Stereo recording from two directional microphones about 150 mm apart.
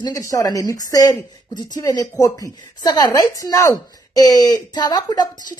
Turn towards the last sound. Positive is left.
turn(degrees=25)  # may be behind; listen again after turning